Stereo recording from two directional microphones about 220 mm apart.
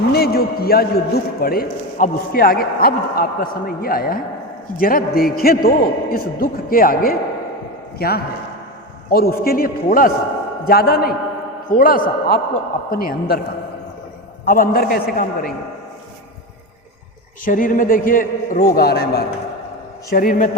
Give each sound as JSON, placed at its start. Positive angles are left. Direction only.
{"t": 0.1, "sound": "a man's voice", "side_deg": 45}
{"t": 14.4, "sound": "a man's voice", "side_deg": 40}
{"t": 17.4, "sound": "a man's voice", "side_deg": 35}